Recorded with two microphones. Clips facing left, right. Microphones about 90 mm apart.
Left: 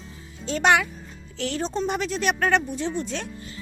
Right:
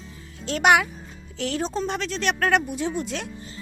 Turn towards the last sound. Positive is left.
turn(degrees=0)  # may be behind; listen again after turning